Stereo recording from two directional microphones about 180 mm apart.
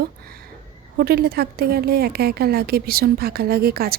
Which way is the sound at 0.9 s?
60° right (ahead or behind).